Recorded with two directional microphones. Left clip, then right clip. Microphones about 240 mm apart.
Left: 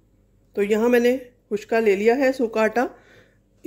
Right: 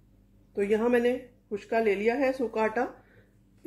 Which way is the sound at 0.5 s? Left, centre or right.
Left.